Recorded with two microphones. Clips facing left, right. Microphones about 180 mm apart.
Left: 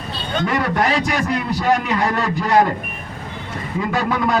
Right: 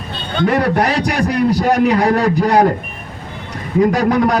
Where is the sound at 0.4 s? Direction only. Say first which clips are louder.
Right 5 dB; 40° right (ahead or behind).